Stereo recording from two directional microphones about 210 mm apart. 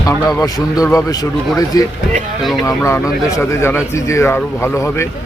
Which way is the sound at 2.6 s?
15° left (ahead or behind).